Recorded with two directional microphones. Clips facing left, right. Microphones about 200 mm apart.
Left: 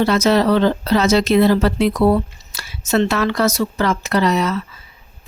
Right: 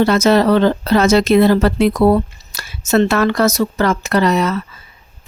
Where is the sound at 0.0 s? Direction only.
50° right (ahead or behind).